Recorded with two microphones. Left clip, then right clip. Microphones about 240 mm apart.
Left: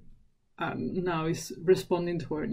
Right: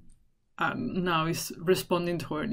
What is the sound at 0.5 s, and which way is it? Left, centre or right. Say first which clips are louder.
Speech: right 3 dB; centre.